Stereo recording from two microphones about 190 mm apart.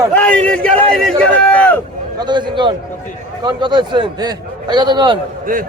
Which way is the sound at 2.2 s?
25° right (ahead or behind).